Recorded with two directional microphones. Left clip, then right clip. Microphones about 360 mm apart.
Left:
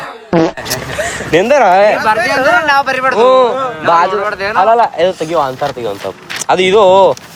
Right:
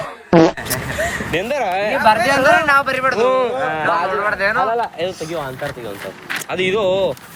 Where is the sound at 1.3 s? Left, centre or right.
Left.